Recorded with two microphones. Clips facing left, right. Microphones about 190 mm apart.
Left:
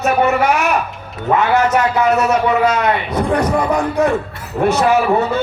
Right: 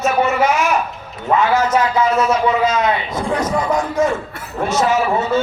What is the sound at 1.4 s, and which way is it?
A man's voice, 65° left (ahead or behind).